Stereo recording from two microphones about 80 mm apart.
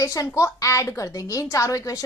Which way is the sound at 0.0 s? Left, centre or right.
Left.